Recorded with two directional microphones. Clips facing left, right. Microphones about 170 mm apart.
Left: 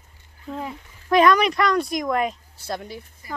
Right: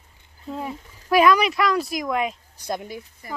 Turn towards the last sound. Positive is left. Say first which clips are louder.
# right 1 dB
turn(degrees=-15)  # may be behind; listen again after turning